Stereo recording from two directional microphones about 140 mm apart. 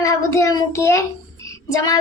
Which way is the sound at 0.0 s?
20° left (ahead or behind).